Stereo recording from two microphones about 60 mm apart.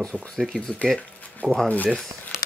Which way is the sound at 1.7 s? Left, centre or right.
Left.